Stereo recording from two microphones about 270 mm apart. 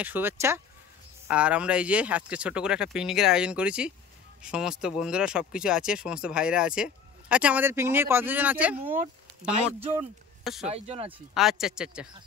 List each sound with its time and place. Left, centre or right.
0.0 s speech: centre
10.7 s speech: right
11.1 s speech: centre